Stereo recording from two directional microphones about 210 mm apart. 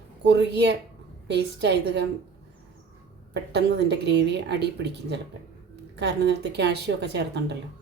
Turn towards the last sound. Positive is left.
turn(degrees=-55)  # may be behind; listen again after turning